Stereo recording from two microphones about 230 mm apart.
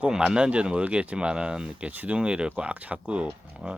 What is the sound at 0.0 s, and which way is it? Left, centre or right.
Speech, centre.